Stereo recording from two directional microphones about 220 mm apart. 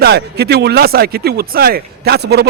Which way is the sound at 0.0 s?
45° right (ahead or behind).